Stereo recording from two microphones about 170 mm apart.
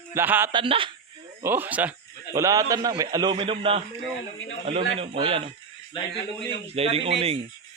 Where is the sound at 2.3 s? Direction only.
20° right (ahead or behind).